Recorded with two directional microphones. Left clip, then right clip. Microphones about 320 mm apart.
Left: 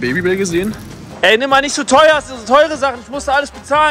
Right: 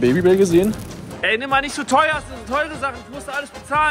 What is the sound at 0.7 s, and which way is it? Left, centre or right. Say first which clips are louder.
A man's voice: left 1 dB; centre.